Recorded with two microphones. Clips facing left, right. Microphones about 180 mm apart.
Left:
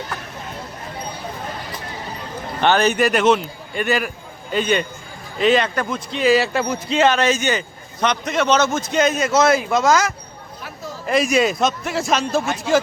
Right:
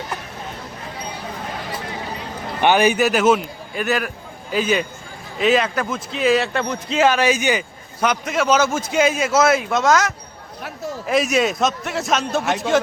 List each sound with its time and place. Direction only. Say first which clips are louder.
2.6 s speech: right 1 dB; 15° right (ahead or behind)